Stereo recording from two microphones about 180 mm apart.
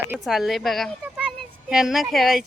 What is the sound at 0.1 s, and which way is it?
Speech, centre (ahead or behind).